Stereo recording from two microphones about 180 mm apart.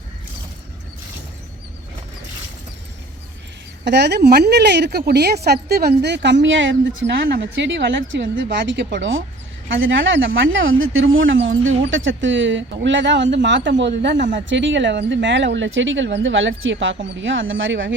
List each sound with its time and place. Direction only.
3.8 s speech: 70° right (ahead or behind)
14.3 s speech: 90° right